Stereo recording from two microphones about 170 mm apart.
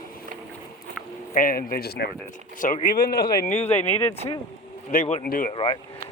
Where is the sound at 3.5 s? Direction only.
40° left (ahead or behind).